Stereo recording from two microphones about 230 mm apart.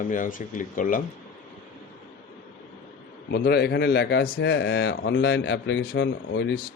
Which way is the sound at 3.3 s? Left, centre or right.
Left.